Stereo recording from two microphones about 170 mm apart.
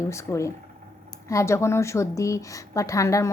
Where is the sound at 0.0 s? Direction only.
15° left (ahead or behind).